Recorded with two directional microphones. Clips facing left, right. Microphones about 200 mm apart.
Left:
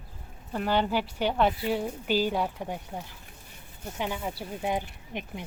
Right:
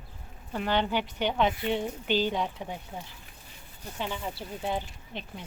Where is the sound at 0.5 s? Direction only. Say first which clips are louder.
Left 1 dB; 5° left (ahead or behind).